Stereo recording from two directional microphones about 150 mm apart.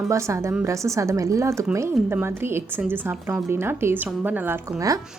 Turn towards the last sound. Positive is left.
turn(degrees=-10)  # may be behind; listen again after turning